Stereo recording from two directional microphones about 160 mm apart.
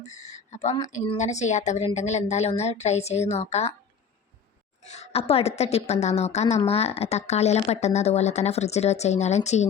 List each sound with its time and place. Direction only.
0.0 s a sound: 45° left (ahead or behind)
0.9 s a woman's voice: 45° left (ahead or behind)
4.8 s a woman's voice: 45° left (ahead or behind)